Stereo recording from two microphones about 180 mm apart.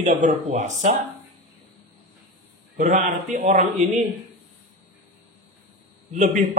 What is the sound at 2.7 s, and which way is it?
A man's voice, 45° right (ahead or behind).